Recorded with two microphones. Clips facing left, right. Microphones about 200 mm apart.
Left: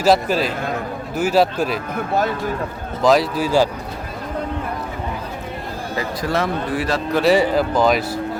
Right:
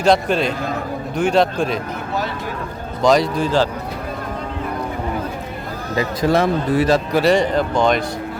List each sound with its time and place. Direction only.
0.0 s speech: 5° left (ahead or behind)
3.0 s speech: 5° left (ahead or behind)
6.0 s speech: 20° right (ahead or behind)
7.2 s speech: 5° left (ahead or behind)